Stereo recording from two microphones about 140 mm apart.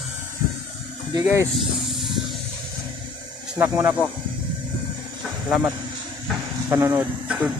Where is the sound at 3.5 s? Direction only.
20° right (ahead or behind).